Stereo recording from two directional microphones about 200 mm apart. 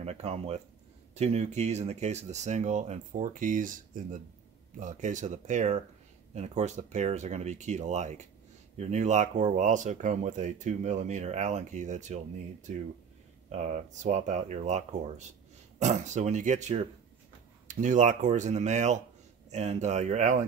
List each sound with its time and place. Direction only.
0.0 s speech: 30° right (ahead or behind)
13.5 s speech: 35° right (ahead or behind)